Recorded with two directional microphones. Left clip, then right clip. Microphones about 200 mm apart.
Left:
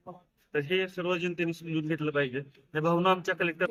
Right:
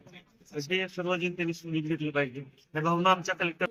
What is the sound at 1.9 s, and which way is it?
A man's voice, 15° left (ahead or behind).